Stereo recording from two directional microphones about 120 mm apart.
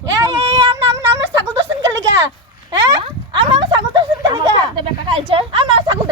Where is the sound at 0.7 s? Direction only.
30° right (ahead or behind).